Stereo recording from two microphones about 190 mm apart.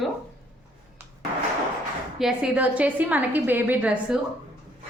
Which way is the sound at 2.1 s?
5° right (ahead or behind).